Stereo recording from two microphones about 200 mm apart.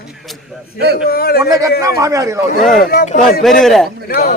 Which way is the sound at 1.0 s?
50° left (ahead or behind).